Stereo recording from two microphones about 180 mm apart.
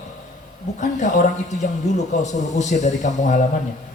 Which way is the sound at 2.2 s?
40° left (ahead or behind).